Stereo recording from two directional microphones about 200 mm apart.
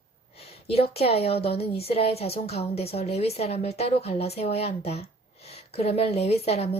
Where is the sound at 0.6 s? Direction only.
30° left (ahead or behind).